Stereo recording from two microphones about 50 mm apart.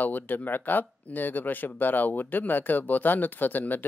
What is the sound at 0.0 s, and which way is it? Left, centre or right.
Speech, left.